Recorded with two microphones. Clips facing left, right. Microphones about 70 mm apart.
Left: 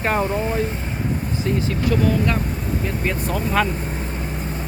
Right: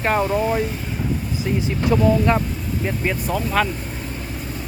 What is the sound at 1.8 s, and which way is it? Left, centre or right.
Speech, right.